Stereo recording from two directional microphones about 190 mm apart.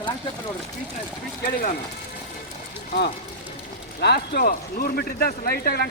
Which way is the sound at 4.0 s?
60° left (ahead or behind).